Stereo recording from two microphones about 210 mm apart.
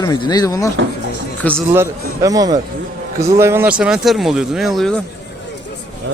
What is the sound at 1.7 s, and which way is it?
Speech, 15° right (ahead or behind).